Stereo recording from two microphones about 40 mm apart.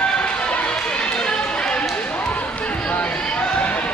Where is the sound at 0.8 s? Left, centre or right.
Left.